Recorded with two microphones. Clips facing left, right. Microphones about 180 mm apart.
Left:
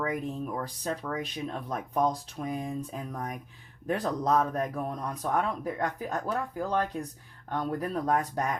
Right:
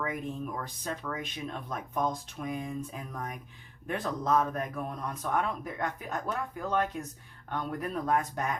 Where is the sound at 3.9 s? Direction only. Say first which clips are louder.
Left 2 dB; 35° left (ahead or behind).